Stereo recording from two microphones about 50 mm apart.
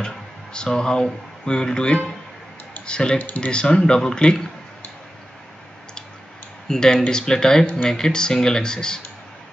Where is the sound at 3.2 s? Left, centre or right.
Left.